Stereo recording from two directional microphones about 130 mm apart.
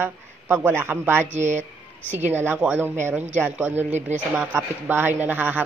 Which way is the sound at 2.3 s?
15° right (ahead or behind).